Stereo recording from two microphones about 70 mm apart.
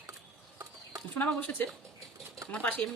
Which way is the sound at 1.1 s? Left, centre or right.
Left.